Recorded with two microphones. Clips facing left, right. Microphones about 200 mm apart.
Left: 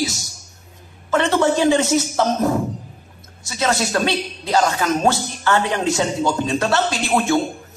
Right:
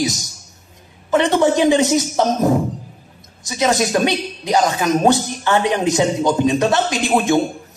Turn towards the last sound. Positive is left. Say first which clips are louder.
# right 2 dB
turn(degrees=-20)  # may be behind; listen again after turning